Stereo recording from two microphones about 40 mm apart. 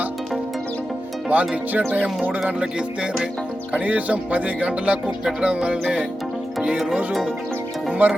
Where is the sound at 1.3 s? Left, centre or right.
Right.